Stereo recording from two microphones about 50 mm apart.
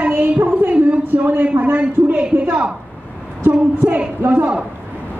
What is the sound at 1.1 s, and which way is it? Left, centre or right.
Speech, right.